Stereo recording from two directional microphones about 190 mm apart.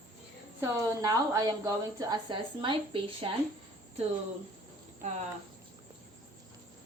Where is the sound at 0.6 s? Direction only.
15° right (ahead or behind).